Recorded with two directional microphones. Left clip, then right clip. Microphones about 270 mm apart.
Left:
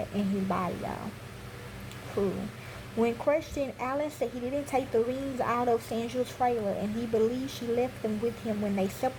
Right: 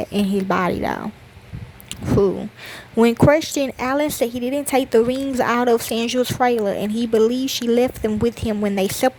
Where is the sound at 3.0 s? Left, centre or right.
Right.